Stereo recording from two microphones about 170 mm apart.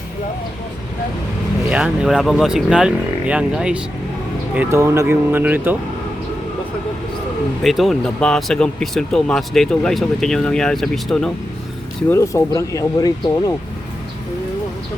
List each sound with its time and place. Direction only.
1.7 s speech: 5° right (ahead or behind)
7.6 s speech: centre (ahead or behind)
12.0 s speech: 15° left (ahead or behind)